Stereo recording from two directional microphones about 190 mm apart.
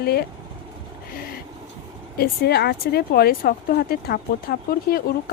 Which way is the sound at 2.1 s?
55° left (ahead or behind).